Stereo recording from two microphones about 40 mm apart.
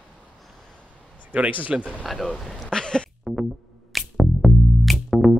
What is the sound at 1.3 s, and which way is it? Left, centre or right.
Speech, right.